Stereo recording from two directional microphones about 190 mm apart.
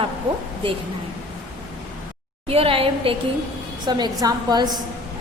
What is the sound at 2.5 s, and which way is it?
A woman's voice, 30° right (ahead or behind).